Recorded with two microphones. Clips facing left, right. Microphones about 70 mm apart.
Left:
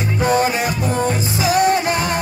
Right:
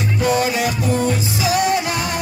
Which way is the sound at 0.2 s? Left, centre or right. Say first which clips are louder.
Left 1 dB; left.